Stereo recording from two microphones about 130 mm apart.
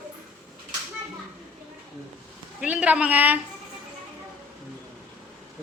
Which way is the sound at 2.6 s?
10° right (ahead or behind).